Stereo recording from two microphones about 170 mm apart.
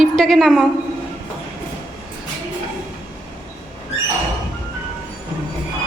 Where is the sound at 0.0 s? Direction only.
Centre (ahead or behind).